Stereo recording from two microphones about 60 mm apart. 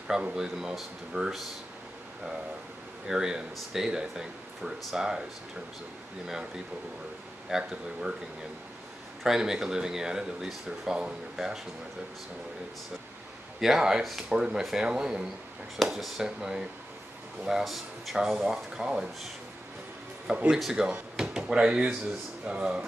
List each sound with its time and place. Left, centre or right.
0.1 s speech: centre
1.1 s speech: right
3.1 s speech: centre
7.4 s speech: centre
9.2 s speech: centre
13.6 s speech: centre
20.2 s speech: centre